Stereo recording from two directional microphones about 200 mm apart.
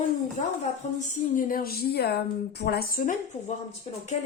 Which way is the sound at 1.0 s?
45° left (ahead or behind).